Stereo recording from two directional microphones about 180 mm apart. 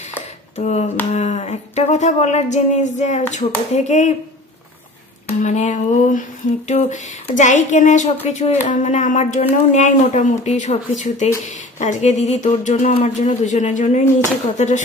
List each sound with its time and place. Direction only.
0.6 s speech: 40° left (ahead or behind)
5.4 s speech: 40° left (ahead or behind)